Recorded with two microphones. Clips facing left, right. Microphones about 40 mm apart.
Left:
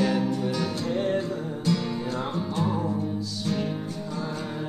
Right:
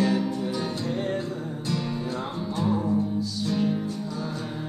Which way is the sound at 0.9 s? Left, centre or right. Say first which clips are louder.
Left 5 dB; left.